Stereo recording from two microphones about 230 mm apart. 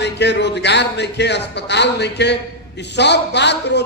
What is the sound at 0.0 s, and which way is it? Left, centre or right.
A man's voice, left.